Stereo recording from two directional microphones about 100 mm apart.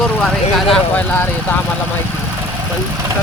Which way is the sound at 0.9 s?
15° left (ahead or behind).